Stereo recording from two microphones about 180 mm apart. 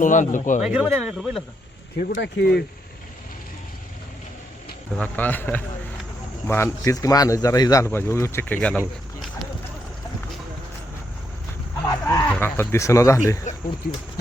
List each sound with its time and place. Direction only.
0.0 s speech: 45° left (ahead or behind)
0.6 s speech: 5° right (ahead or behind)
2.0 s speech: 50° left (ahead or behind)
4.9 s speech: 10° left (ahead or behind)
11.9 s a sound: 15° left (ahead or behind)
12.4 s speech: 15° left (ahead or behind)
13.5 s a sound: 40° left (ahead or behind)